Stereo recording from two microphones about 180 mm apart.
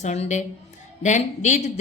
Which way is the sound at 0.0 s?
40° left (ahead or behind).